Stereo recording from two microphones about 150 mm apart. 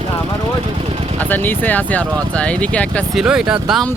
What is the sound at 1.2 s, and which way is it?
Speech, 10° left (ahead or behind).